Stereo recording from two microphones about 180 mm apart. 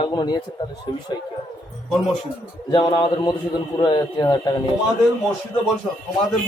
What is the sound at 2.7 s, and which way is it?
A man's voice, 25° left (ahead or behind).